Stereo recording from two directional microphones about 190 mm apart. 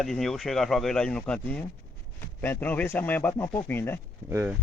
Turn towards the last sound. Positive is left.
turn(degrees=-15)  # may be behind; listen again after turning